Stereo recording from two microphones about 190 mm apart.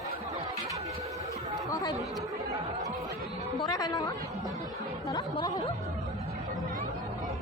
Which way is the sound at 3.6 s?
20° left (ahead or behind).